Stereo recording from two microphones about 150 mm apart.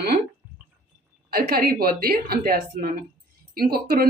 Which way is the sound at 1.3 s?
80° right.